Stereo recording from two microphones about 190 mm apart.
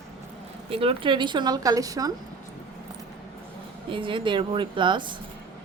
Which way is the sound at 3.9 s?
25° right (ahead or behind).